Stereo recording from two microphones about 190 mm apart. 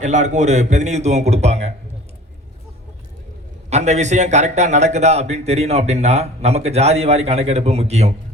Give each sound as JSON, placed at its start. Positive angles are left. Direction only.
{"t": 0.0, "sound": "speech", "side_deg": -40}
{"t": 3.7, "sound": "speech", "side_deg": -35}